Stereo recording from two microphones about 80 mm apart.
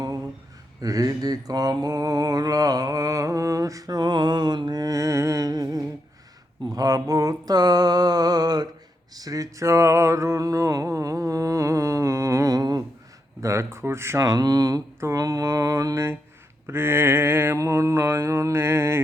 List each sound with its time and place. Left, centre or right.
0.8 s mantra: right
9.1 s a sound: right
13.4 s mantra: right
14.2 s mantra: right